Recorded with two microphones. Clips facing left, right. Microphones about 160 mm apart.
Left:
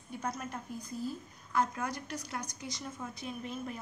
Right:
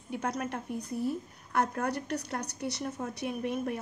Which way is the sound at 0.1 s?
70° right (ahead or behind).